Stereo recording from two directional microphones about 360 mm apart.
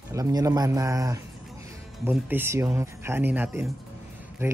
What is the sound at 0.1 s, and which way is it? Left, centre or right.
Speech, centre.